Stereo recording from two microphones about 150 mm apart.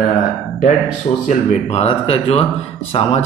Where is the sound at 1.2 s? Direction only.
45° left (ahead or behind).